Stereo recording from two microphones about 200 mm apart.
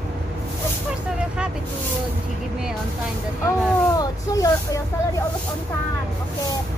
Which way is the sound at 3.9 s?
15° left (ahead or behind).